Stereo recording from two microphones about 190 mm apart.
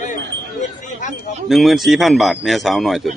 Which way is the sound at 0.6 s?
40° left (ahead or behind).